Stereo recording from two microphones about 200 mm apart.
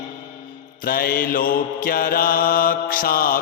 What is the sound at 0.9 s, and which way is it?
Mantra, 50° left (ahead or behind).